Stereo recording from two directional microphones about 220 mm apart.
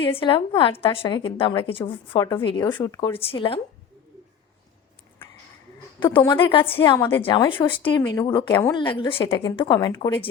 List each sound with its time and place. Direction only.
0.0 s a woman's voice: 25° left (ahead or behind)
6.0 s a woman's voice: 20° left (ahead or behind)
6.7 s a woman's voice: 10° left (ahead or behind)
7.2 s a woman's voice: 25° left (ahead or behind)